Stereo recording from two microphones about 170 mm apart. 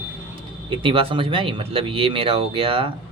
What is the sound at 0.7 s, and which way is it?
Speech, 30° right (ahead or behind).